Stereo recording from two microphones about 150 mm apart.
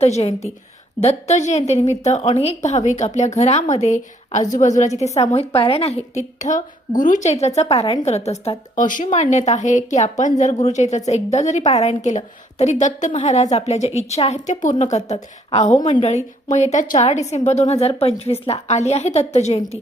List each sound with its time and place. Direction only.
0.0 s a woman's voice: 45° left (ahead or behind)
6.1 s a woman's voice: 55° left (ahead or behind)
8.7 s a woman's voice: 60° left (ahead or behind)
15.8 s a woman's voice: 35° left (ahead or behind)
16.0 s a woman's voice: 50° left (ahead or behind)